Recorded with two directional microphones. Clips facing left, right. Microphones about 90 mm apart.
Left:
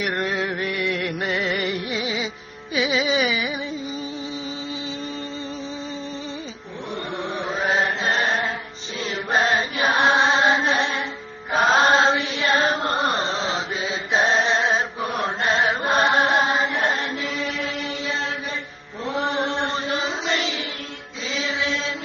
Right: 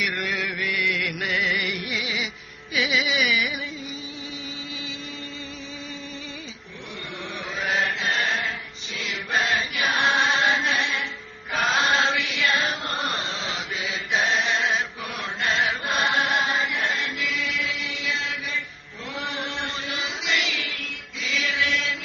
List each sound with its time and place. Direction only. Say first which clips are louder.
0.0 s music: left 4 dB; 35° left (ahead or behind)
2.7 s carnatic music: left 3 dB; 30° left (ahead or behind)
7.2 s chant: left 5 dB; 30° left (ahead or behind)
19.0 s music: left 8 dB; 35° left (ahead or behind)
21.2 s chant: left 1 dB; 30° left (ahead or behind)